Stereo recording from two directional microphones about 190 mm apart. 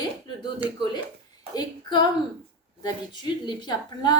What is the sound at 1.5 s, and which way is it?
A woman's voice, 20° left (ahead or behind).